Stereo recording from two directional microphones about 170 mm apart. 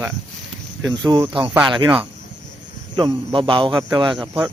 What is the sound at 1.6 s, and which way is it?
Speech, 25° right (ahead or behind).